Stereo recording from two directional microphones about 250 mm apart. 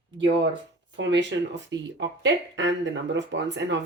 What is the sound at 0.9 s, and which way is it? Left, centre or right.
Speech, right.